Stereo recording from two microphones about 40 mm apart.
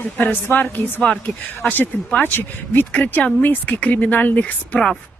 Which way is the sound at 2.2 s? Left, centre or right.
Left.